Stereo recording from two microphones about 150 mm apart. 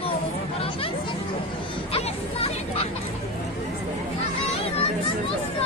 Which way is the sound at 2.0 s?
45° left (ahead or behind).